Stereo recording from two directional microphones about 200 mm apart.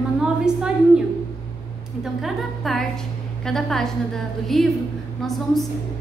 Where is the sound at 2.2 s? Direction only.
Centre (ahead or behind).